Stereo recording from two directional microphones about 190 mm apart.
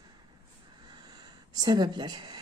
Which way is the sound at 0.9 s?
20° right (ahead or behind).